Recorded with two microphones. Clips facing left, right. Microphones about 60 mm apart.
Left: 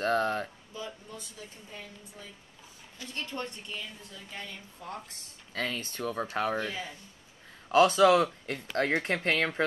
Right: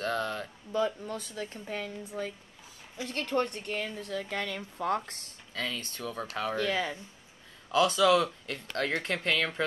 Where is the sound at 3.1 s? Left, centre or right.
Right.